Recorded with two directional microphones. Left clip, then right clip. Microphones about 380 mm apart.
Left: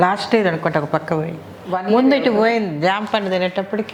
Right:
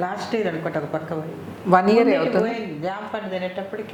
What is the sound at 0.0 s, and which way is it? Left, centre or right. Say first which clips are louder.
A woman's voice: left 8 dB; left.